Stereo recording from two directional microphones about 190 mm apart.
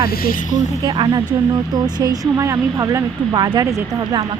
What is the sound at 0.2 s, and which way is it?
Speech, 45° left (ahead or behind).